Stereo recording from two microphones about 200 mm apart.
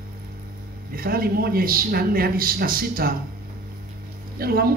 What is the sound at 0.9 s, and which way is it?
A man's voice, 50° right (ahead or behind).